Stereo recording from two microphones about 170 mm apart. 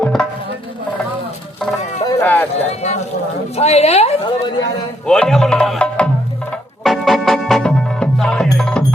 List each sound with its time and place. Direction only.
0.0 s music: 5° left (ahead or behind)
2.0 s run: 10° left (ahead or behind)
2.6 s speech: 40° left (ahead or behind)
5.0 s music: 5° left (ahead or behind)